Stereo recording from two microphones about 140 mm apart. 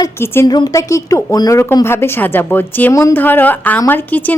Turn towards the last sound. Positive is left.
turn(degrees=15)  # may be behind; listen again after turning